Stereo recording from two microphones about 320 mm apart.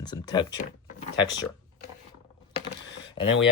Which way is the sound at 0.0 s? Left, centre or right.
Centre.